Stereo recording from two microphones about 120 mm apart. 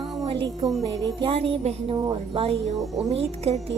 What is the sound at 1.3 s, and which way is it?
A woman's voice, 55° right (ahead or behind).